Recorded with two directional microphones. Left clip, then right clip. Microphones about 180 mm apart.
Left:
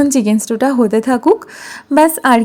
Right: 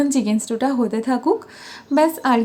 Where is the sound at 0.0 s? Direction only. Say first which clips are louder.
Left 6 dB; 40° left (ahead or behind).